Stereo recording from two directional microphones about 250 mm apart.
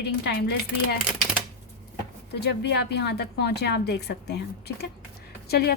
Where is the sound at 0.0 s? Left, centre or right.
Left.